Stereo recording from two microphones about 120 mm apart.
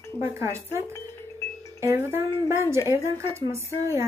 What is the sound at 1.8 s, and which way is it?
A woman's voice, 20° right (ahead or behind).